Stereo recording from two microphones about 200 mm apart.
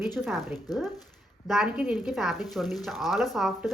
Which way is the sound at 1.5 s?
5° right (ahead or behind).